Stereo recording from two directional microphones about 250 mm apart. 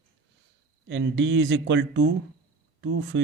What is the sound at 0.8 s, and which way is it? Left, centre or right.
Speech, right.